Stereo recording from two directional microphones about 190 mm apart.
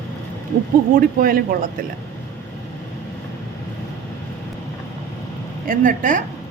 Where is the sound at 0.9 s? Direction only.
50° right (ahead or behind).